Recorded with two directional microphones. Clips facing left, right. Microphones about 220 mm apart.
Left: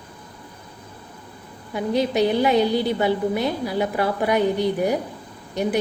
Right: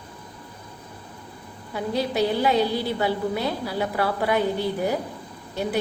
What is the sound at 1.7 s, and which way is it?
A woman's voice, 20° left (ahead or behind).